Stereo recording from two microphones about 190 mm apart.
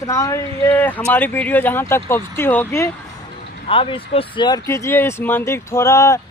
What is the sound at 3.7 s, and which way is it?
Speech, 25° left (ahead or behind).